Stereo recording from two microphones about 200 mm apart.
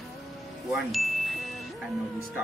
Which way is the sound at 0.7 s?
Centre (ahead or behind).